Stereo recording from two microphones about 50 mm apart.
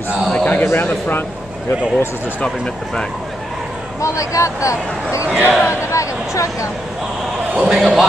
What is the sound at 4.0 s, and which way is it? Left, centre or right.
Speech, left.